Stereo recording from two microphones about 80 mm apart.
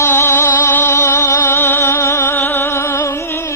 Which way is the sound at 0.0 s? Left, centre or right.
Left.